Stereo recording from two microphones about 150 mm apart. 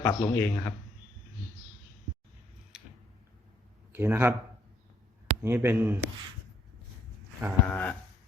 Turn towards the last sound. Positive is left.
turn(degrees=10)  # may be behind; listen again after turning